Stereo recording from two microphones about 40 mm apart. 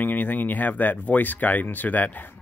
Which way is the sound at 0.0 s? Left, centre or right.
Left.